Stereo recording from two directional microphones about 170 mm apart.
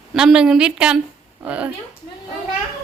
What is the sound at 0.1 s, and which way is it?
Speech, 5° right (ahead or behind).